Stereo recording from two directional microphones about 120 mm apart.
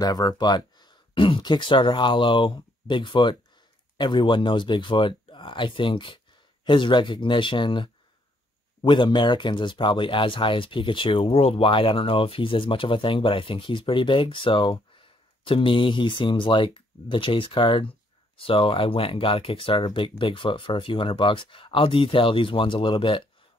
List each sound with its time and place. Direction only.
0.0 s speech: 30° left (ahead or behind)